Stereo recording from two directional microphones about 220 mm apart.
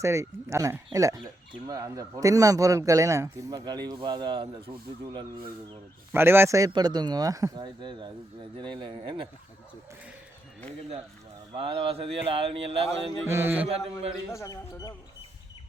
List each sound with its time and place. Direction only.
0.0 s a man's voice: 15° right (ahead or behind)
6.1 s a man's voice: 10° right (ahead or behind)
11.5 s speech: 25° right (ahead or behind)
13.2 s a man's voice: 10° right (ahead or behind)
14.3 s speech: 15° left (ahead or behind)